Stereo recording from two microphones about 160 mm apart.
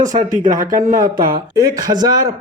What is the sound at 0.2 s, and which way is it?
Speech, 50° right (ahead or behind).